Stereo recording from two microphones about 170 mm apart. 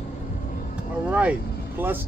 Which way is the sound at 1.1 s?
10° right (ahead or behind).